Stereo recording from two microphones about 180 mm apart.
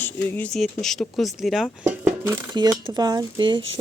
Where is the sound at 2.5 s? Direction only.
25° right (ahead or behind).